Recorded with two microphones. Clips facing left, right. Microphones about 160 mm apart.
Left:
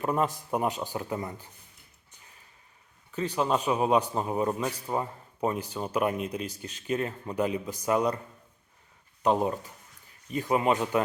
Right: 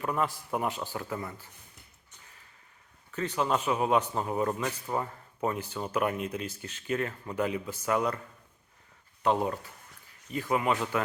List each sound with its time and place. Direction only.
0.0 s a man's voice: 25° left (ahead or behind)
3.1 s a man's voice: 10° left (ahead or behind)
6.4 s a man's voice: 15° left (ahead or behind)
6.8 s a man's voice: 25° left (ahead or behind)
9.2 s a man's voice: 15° left (ahead or behind)